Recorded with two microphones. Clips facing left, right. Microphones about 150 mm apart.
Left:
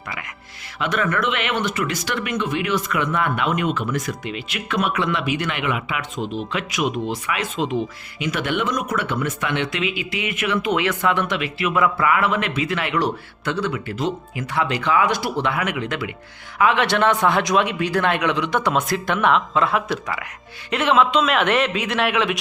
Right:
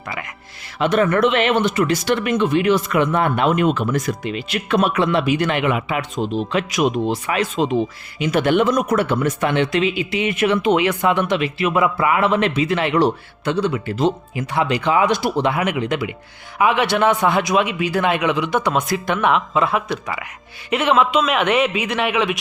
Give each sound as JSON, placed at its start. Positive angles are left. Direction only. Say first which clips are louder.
{"t": 0.8, "sound": "speech", "louder": "right 7 dB", "side_deg": -30}
{"t": 11.3, "sound": "a man's voice", "louder": "right 3 dB", "side_deg": -30}